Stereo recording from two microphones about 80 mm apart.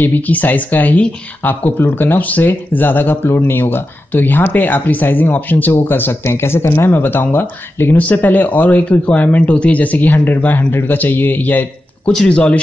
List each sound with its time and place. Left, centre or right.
0.0 s speech: left
12.1 s speech: centre